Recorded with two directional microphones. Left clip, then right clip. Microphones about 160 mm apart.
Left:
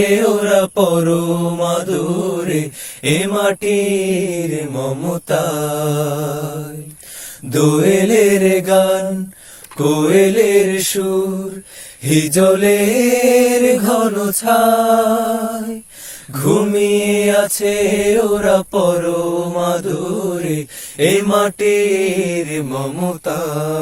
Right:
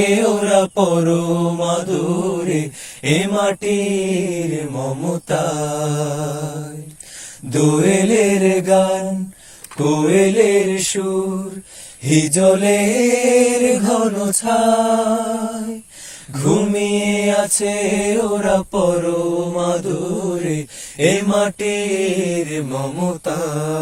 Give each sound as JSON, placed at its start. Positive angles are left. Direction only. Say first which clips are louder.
{"t": 0.0, "sound": "mantra", "louder": "left 2 dB", "side_deg": 35}
{"t": 7.5, "sound": "mantra", "louder": "left 2 dB", "side_deg": 40}
{"t": 12.0, "sound": "mantra", "louder": "left 1 dB", "side_deg": 35}
{"t": 22.4, "sound": "mantra", "louder": "left 1 dB", "side_deg": 20}